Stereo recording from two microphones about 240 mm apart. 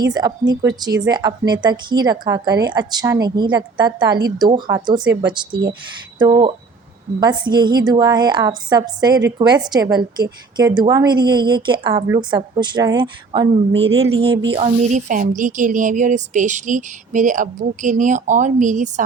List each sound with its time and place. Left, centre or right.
0.0 s a woman's voice: centre